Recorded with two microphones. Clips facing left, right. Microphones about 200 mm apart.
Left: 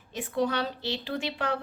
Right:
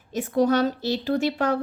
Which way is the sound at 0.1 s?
45° right (ahead or behind).